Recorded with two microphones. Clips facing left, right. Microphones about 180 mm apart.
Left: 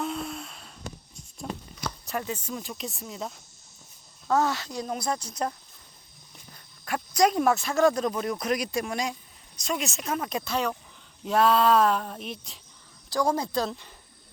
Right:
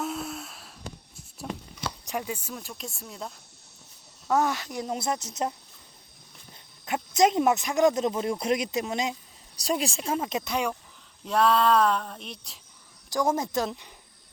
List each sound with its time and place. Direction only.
0.0 s a sound: 5° right (ahead or behind)
2.0 s speech: 10° right (ahead or behind)
4.3 s speech: 15° right (ahead or behind)
6.8 s speech: 20° right (ahead or behind)
9.6 s speech: 35° right (ahead or behind); by 10.8 s 15° right (ahead or behind)
11.3 s speech: centre (ahead or behind)
13.1 s speech: 20° right (ahead or behind)